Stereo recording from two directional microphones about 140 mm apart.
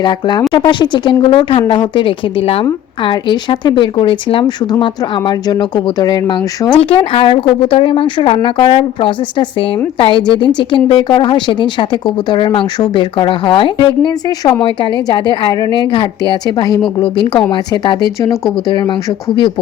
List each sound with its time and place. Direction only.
0.0 s speech: 30° left (ahead or behind)
6.7 s speech: 40° left (ahead or behind)